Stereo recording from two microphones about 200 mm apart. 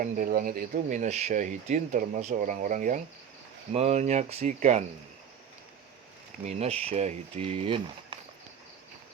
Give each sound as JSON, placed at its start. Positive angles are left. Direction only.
{"t": 0.0, "sound": "speech", "side_deg": -45}
{"t": 6.4, "sound": "speech", "side_deg": -30}